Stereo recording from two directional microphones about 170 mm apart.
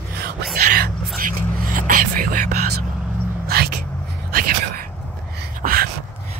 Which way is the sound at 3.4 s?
65° right (ahead or behind).